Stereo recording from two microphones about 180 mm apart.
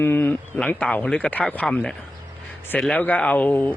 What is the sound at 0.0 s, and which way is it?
Speech, 10° left (ahead or behind).